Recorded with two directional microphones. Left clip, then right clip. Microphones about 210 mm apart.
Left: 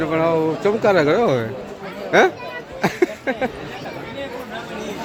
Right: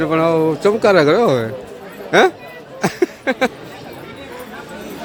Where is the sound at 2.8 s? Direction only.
10° right (ahead or behind).